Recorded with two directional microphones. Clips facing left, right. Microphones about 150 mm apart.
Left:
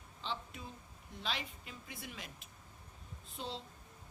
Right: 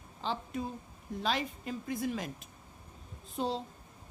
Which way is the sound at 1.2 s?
45° right (ahead or behind).